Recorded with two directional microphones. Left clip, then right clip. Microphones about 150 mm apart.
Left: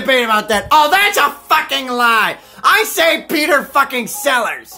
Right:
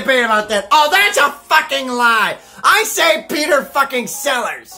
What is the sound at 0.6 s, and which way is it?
Speech, 30° left (ahead or behind).